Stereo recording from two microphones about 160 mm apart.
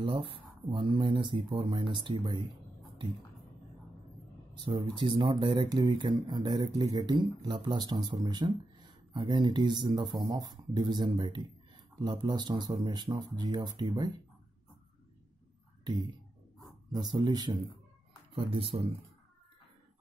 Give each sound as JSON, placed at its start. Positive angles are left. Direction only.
{"t": 0.0, "sound": "speech", "side_deg": -35}
{"t": 4.6, "sound": "speech", "side_deg": -30}
{"t": 15.8, "sound": "speech", "side_deg": -25}